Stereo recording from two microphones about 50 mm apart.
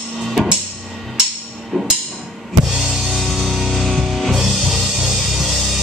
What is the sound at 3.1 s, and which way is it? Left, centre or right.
Music, centre.